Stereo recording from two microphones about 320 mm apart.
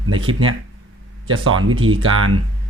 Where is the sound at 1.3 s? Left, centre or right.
Right.